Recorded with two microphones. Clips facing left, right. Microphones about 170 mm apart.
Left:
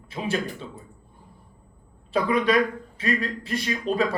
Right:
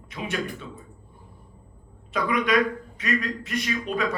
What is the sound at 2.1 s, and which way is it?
A man's voice, 30° left (ahead or behind).